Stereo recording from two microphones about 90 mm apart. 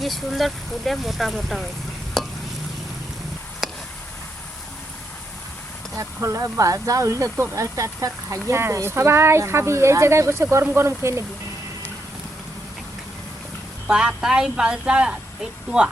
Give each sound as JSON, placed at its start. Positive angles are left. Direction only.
{"t": 0.0, "sound": "speech", "side_deg": 0}
{"t": 2.2, "sound": "stir", "side_deg": 5}
{"t": 6.0, "sound": "speech", "side_deg": -35}
{"t": 13.8, "sound": "speech", "side_deg": -10}